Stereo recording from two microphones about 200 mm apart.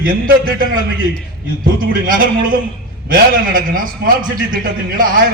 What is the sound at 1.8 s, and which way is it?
A man's voice, 45° right (ahead or behind).